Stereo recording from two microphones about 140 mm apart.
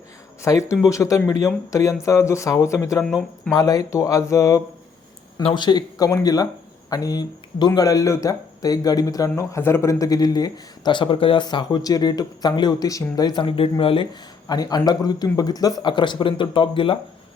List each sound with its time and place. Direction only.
0.4 s speech: 20° left (ahead or behind)
3.0 s speech: centre (ahead or behind)
3.5 s speech: 25° left (ahead or behind)
5.4 s speech: 35° left (ahead or behind)